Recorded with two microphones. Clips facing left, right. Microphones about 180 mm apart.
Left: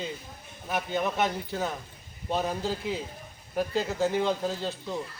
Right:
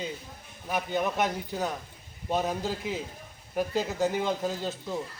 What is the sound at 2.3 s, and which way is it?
A man's voice, 10° right (ahead or behind).